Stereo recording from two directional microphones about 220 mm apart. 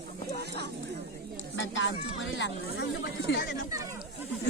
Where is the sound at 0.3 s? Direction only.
50° right (ahead or behind).